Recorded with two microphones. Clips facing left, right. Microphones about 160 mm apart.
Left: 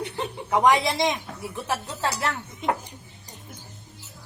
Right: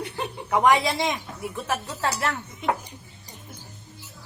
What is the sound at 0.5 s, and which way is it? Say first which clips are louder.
A woman's voice: even; 20° left (ahead or behind).